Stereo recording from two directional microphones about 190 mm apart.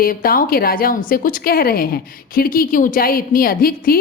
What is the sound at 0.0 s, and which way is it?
A woman's voice, 50° left (ahead or behind).